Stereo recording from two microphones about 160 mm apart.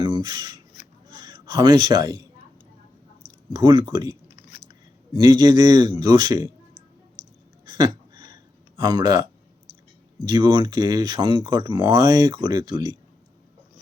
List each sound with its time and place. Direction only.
0.0 s a man's voice: 30° right (ahead or behind)
3.5 s speech: 30° right (ahead or behind)
5.1 s speech: 25° right (ahead or behind)
7.6 s a sound: 25° right (ahead or behind)
10.2 s speech: 25° right (ahead or behind)